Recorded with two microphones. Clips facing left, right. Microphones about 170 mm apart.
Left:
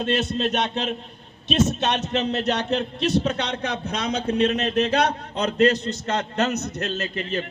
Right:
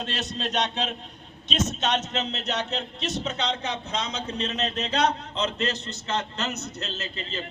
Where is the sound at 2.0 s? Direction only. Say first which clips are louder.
Left 7 dB; 60° left (ahead or behind).